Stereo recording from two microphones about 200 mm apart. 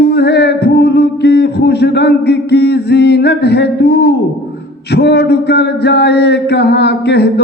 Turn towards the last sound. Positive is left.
turn(degrees=55)  # may be behind; listen again after turning